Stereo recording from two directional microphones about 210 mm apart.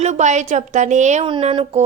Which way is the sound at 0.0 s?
35° right (ahead or behind).